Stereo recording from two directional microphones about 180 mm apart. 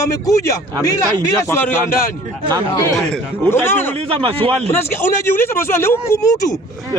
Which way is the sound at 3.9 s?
30° right (ahead or behind).